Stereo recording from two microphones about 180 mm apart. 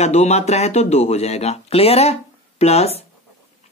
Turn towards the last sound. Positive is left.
turn(degrees=35)  # may be behind; listen again after turning